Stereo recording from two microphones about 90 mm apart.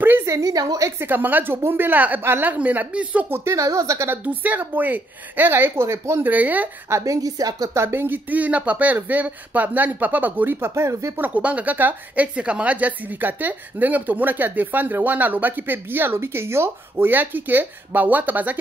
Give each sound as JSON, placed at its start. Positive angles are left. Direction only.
{"t": 0.0, "sound": "a woman's voice", "side_deg": -30}
{"t": 3.5, "sound": "speech", "side_deg": -35}
{"t": 4.2, "sound": "a woman's voice", "side_deg": -20}
{"t": 6.9, "sound": "a woman's voice", "side_deg": -40}
{"t": 7.7, "sound": "a woman's voice", "side_deg": -25}
{"t": 10.7, "sound": "speech", "side_deg": -35}
{"t": 11.1, "sound": "a woman's voice", "side_deg": -20}